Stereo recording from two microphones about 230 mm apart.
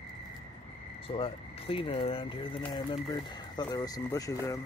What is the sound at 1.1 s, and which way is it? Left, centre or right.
Speech, left.